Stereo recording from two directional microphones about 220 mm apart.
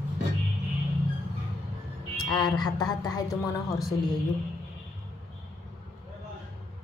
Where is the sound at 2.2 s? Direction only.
20° left (ahead or behind).